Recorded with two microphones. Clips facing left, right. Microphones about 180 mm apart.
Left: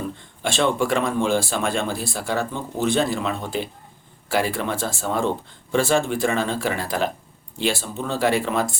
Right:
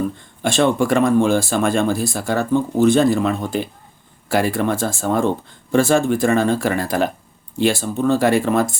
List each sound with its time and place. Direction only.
0.4 s speech: 45° right (ahead or behind)